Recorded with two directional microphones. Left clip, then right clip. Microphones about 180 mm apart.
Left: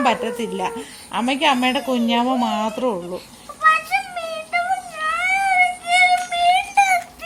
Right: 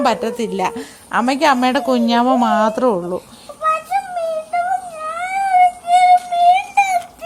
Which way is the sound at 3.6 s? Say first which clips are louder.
Left 1 dB; 5° right (ahead or behind).